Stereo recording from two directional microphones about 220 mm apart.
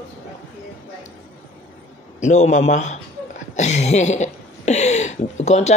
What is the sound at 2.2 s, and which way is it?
Speech, 35° left (ahead or behind).